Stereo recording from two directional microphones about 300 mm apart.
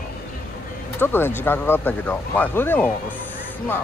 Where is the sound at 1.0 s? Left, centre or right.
Centre.